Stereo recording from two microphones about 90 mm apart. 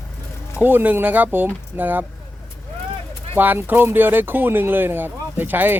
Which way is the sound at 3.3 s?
20° right (ahead or behind).